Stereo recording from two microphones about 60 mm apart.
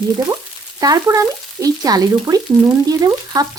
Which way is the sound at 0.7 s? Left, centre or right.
Right.